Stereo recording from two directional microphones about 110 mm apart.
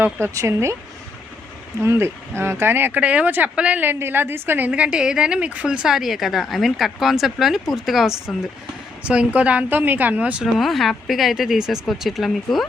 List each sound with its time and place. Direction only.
0.0 s speech: 25° right (ahead or behind)
1.8 s speech: 25° right (ahead or behind)
10.6 s speech: centre (ahead or behind)